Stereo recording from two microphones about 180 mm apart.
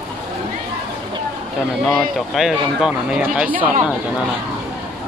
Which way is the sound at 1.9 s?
Centre (ahead or behind).